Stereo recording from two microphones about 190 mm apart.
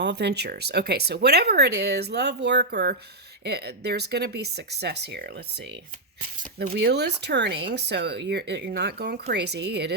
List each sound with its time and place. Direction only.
0.0 s speech: 60° right (ahead or behind)
6.7 s speech: 60° right (ahead or behind)